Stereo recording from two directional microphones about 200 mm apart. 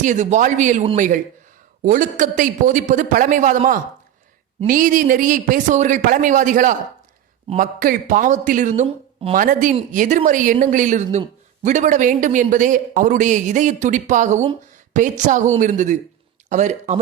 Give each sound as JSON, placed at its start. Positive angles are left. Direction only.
{"t": 0.0, "sound": "a man's voice", "side_deg": -40}